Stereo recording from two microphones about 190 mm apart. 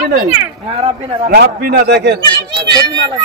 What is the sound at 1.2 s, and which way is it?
Speech, 55° right (ahead or behind).